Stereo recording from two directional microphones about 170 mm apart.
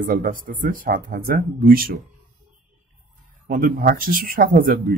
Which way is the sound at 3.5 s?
55° right (ahead or behind).